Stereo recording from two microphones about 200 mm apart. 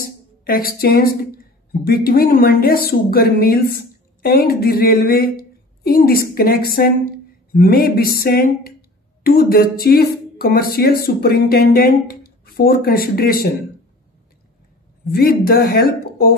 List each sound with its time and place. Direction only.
0.0 s a sound: 45° left (ahead or behind)
1.7 s speech: 50° left (ahead or behind)
15.0 s speech: 50° left (ahead or behind)